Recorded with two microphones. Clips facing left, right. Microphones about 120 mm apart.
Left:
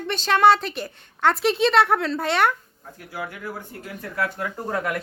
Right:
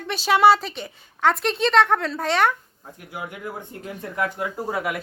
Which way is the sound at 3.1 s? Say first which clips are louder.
Even; 20° right (ahead or behind).